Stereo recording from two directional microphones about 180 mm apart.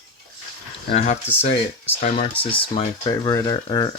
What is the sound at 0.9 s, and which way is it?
Speech, 35° left (ahead or behind).